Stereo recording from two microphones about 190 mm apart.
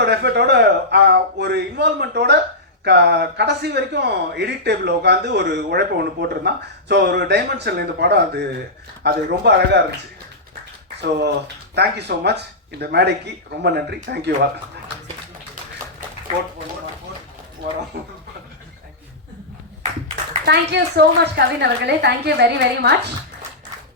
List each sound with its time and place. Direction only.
0.0 s a man's voice: 60° right (ahead or behind)
11.2 s a man's voice: 60° right (ahead or behind)
17.9 s a man's voice: 55° right (ahead or behind)
20.4 s a man's voice: 60° right (ahead or behind)